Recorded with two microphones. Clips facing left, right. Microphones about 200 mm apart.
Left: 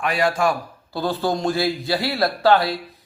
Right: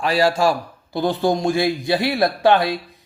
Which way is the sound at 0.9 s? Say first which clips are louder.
Right 3 dB; 15° right (ahead or behind).